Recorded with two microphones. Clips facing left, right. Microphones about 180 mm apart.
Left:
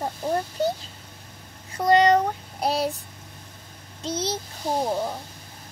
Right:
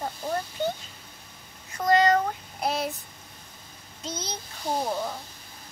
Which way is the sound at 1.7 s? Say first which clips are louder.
Left 3 dB; 30° left (ahead or behind).